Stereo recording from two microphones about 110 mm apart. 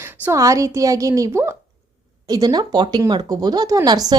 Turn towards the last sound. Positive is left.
turn(degrees=-40)  # may be behind; listen again after turning